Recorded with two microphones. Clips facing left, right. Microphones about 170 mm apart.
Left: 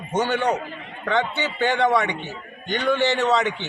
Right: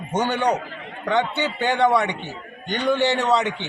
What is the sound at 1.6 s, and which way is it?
A man's voice, 15° right (ahead or behind).